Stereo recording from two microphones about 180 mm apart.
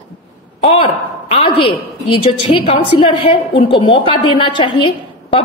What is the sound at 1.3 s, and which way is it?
A woman's voice, 30° left (ahead or behind).